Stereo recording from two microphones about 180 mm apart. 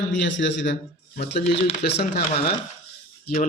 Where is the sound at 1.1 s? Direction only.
55° left (ahead or behind).